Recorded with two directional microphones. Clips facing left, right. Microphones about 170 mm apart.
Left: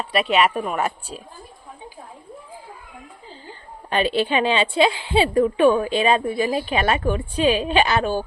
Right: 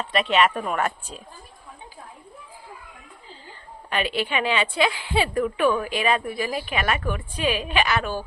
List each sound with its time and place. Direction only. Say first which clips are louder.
0.0 s speech: left 2 dB; 10° left (ahead or behind)
3.8 s a woman's voice: left 5 dB; 30° left (ahead or behind)